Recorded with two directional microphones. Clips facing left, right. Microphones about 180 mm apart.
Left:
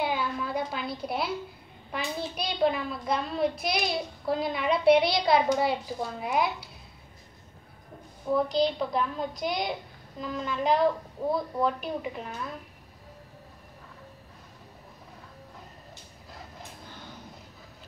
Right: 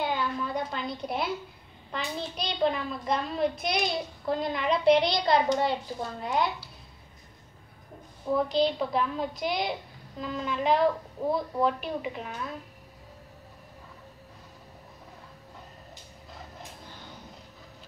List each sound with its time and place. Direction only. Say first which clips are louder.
0.0 s a sound: even; 10° left (ahead or behind)
1.9 s hands: left 1 dB; 10° left (ahead or behind)
2.3 s a child's voice: left 1 dB; 5° left (ahead or behind)
8.3 s a child's voice: even; centre (ahead or behind)